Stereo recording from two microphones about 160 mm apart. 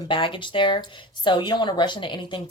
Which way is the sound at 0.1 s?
30° left (ahead or behind).